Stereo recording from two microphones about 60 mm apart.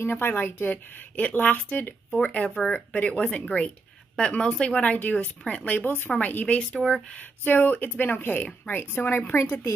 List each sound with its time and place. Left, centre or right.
0.0 s speech: left
2.2 s speech: left
5.8 s speech: left
6.8 s speech: centre
7.2 s speech: left